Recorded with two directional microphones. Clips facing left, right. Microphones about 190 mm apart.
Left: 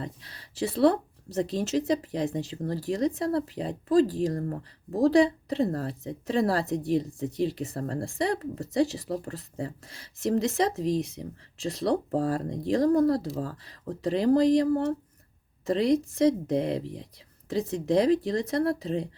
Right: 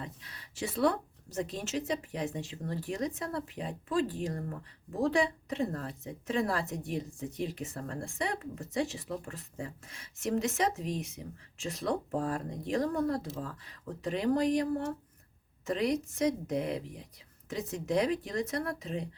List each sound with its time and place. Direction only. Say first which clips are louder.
0.0 s speech: left 6 dB; 35° left (ahead or behind)